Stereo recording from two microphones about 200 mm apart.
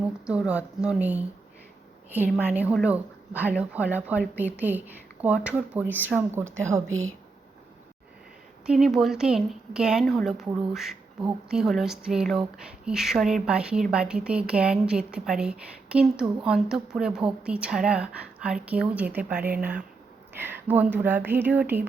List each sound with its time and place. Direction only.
0.3 s speech: 5° right (ahead or behind)
6.8 s a woman's voice: 90° right
8.6 s speech: centre (ahead or behind)